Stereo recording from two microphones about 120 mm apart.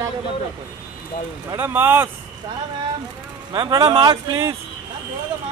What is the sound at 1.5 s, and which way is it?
Speech, 20° right (ahead or behind).